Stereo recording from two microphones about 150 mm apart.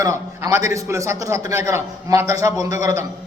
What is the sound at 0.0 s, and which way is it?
A man's voice, 20° right (ahead or behind).